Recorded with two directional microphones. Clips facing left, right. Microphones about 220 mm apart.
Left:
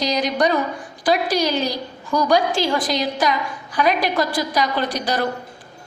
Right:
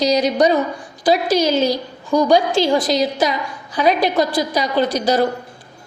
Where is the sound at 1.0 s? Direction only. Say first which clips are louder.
Right 3 dB; 25° right (ahead or behind).